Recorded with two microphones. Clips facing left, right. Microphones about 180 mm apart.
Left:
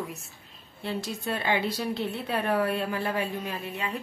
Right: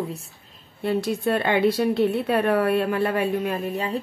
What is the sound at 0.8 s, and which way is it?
A woman's voice, 55° right (ahead or behind).